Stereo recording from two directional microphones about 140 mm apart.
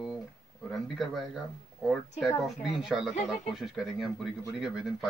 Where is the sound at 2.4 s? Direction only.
5° right (ahead or behind).